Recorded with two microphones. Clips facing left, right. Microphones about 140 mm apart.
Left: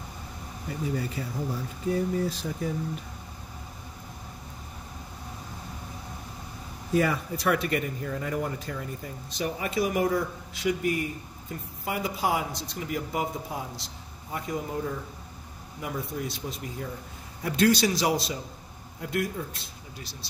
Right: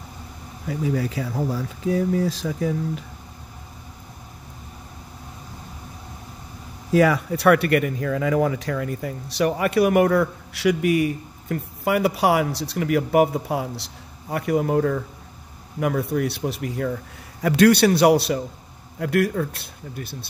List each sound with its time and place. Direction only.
0.9 s speech: 90° right
6.9 s speech: 90° right; by 20.2 s 55° right (ahead or behind)